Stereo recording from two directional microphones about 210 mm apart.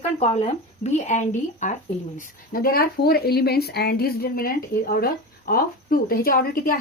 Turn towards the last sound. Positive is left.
turn(degrees=45)  # may be behind; listen again after turning